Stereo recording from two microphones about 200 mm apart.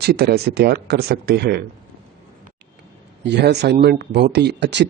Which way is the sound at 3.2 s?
55° right (ahead or behind).